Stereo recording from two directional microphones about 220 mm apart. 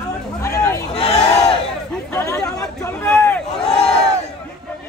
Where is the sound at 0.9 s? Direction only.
30° left (ahead or behind).